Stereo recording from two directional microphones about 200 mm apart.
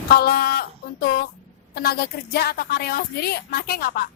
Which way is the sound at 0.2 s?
50° left (ahead or behind).